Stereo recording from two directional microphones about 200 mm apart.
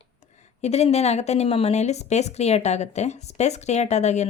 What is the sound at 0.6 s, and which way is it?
Speech, 35° left (ahead or behind).